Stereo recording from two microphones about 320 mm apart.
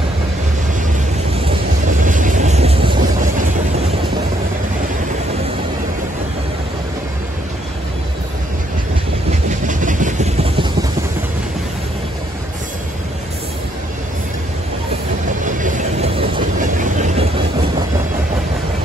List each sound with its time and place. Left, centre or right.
1.9 s vehicle: right
9.7 s vehicle: right
15.4 s train: right